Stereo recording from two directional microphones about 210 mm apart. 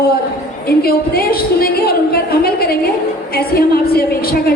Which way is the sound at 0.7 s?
45° left (ahead or behind).